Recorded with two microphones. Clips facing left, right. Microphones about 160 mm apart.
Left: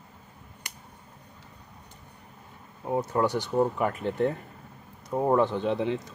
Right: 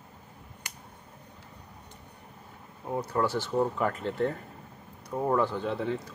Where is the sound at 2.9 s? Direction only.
20° left (ahead or behind).